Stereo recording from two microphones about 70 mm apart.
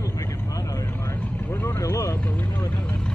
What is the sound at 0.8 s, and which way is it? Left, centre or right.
Vehicle, left.